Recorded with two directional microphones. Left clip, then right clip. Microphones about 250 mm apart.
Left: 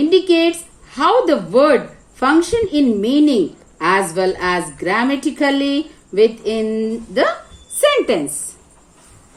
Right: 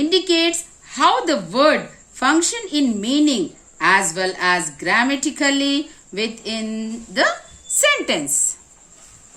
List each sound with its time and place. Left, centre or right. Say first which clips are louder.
0.1 s a woman's voice: left 4 dB; right